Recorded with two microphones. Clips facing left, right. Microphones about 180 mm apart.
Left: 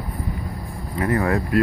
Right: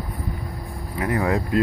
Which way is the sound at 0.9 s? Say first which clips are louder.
Left 2 dB; 15° right (ahead or behind).